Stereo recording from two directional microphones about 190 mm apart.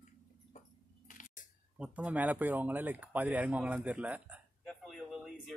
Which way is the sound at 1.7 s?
5° right (ahead or behind).